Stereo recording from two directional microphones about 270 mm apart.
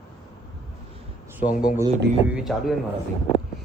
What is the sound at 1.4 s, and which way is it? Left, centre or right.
Speech, left.